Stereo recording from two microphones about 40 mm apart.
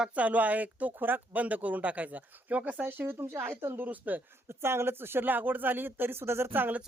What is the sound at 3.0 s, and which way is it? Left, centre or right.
Speech, right.